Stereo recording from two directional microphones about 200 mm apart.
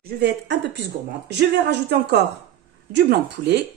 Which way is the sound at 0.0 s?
55° right (ahead or behind).